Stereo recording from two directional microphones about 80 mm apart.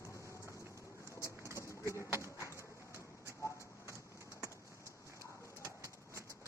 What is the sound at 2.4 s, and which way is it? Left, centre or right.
Bird, left.